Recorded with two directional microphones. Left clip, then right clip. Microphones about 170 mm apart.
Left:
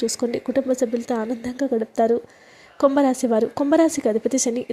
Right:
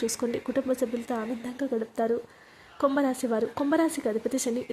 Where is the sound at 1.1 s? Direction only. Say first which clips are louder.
Left 7 dB; 35° left (ahead or behind).